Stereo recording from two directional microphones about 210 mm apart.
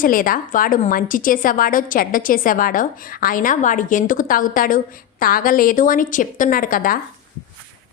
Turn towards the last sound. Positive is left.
turn(degrees=40)  # may be behind; listen again after turning